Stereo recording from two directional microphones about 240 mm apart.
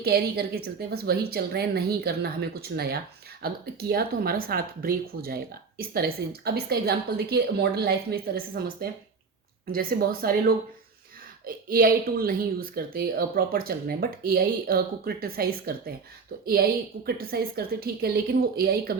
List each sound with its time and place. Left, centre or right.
0.0 s speech: right
17.1 s speech: right